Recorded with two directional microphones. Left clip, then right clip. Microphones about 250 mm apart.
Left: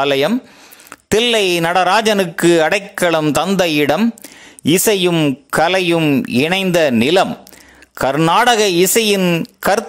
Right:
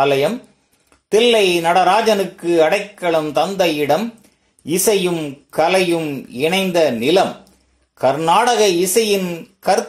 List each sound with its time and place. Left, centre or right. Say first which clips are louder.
0.0 s speech: left 1 dB; left